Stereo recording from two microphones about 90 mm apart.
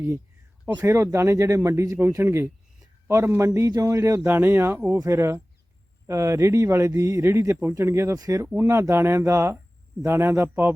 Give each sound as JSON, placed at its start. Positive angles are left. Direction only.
{"t": 0.9, "sound": "speech", "side_deg": -30}
{"t": 4.3, "sound": "speech", "side_deg": -25}